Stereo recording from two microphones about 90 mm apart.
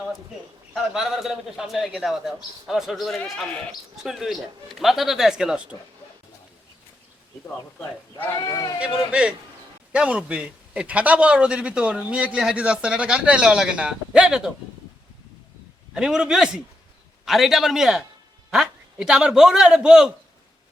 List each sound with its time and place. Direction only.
0.7 s speech: 5° right (ahead or behind)
8.4 s speech: 40° left (ahead or behind)
8.8 s a man's voice: 10° right (ahead or behind)
16.0 s a man's voice: 5° right (ahead or behind)